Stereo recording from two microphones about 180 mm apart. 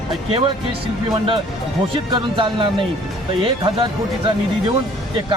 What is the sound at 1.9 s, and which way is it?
Speech, 30° right (ahead or behind).